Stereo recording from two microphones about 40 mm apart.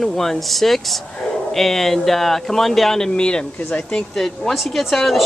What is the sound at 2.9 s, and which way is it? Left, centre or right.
Speech, centre.